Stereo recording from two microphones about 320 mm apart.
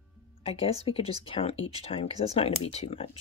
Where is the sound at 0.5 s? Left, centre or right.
Centre.